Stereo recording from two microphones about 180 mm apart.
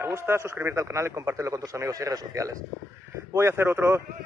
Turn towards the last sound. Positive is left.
turn(degrees=-15)  # may be behind; listen again after turning